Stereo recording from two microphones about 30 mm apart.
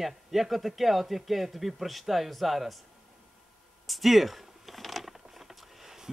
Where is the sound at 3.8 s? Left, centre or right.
Centre.